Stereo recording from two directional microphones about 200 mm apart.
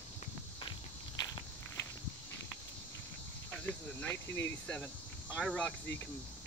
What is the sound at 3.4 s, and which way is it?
Speech, 10° left (ahead or behind).